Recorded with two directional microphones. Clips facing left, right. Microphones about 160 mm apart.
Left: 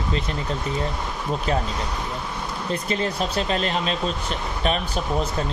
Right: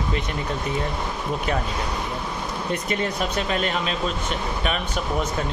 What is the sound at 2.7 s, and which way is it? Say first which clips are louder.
Speech: left 1 dB; 30° left (ahead or behind).